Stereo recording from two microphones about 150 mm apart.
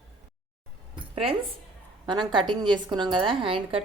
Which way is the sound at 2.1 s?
30° right (ahead or behind).